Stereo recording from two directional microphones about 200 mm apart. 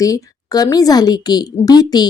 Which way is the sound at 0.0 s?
15° left (ahead or behind).